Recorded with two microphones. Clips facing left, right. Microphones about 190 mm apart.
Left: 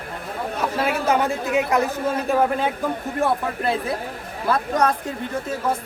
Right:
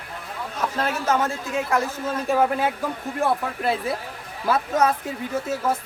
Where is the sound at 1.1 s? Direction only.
15° left (ahead or behind).